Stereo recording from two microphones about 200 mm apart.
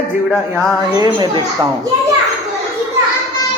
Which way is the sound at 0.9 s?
20° right (ahead or behind).